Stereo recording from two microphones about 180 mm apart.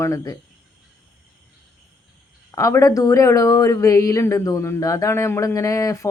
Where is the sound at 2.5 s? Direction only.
15° left (ahead or behind).